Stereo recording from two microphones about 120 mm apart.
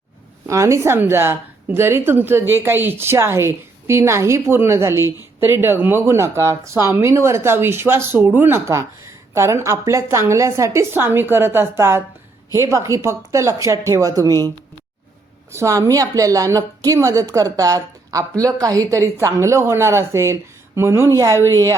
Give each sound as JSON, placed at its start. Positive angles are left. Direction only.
{"t": 0.4, "sound": "a woman's voice", "side_deg": -25}
{"t": 15.5, "sound": "a woman's voice", "side_deg": -25}